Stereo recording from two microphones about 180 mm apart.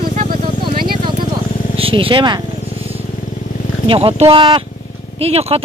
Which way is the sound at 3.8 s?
30° right (ahead or behind).